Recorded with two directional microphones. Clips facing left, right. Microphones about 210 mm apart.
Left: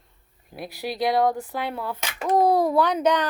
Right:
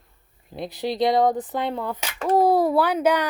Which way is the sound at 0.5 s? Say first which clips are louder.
Right 4 dB; 20° right (ahead or behind).